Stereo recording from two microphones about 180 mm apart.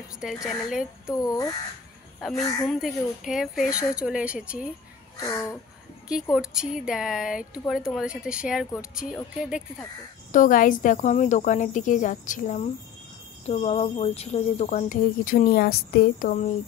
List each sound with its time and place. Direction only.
0.5 s speech: 5° right (ahead or behind)
1.1 s babbling: 20° left (ahead or behind)
2.1 s speech: centre (ahead or behind)
5.1 s babbling: 20° left (ahead or behind)
6.3 s speech: 5° right (ahead or behind)
10.3 s speech: 45° left (ahead or behind)
13.5 s speech: 35° left (ahead or behind); by 16.4 s 50° left (ahead or behind)